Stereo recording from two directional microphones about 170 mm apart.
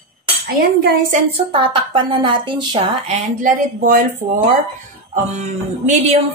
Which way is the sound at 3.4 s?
50° right (ahead or behind).